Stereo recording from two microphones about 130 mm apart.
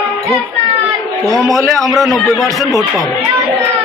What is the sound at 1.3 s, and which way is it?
Speech, 25° right (ahead or behind).